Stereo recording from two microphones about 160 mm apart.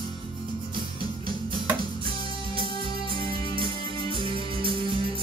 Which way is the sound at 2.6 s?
35° right (ahead or behind).